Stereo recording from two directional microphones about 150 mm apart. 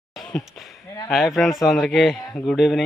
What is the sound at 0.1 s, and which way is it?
Speech, 5° left (ahead or behind).